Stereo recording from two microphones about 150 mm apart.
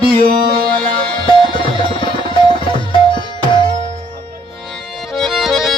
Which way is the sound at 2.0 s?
35° left (ahead or behind).